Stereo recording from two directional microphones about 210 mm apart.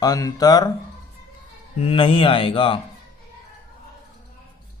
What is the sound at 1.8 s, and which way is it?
Speech, 25° left (ahead or behind).